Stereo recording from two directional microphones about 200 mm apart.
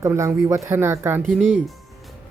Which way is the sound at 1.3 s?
Centre (ahead or behind).